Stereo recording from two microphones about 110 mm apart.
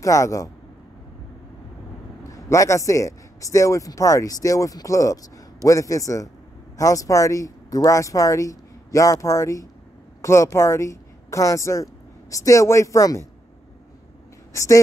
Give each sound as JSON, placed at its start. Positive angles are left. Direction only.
{"t": 0.0, "sound": "a man's voice", "side_deg": 30}
{"t": 2.2, "sound": "a man's voice", "side_deg": 30}
{"t": 14.5, "sound": "speech", "side_deg": 30}